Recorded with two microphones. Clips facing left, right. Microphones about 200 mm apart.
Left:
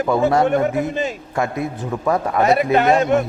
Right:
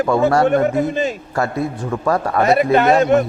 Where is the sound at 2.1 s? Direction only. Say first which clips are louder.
Right 1 dB; 20° left (ahead or behind).